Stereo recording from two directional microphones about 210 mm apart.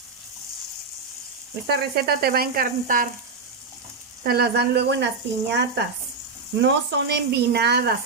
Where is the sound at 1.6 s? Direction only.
50° right (ahead or behind).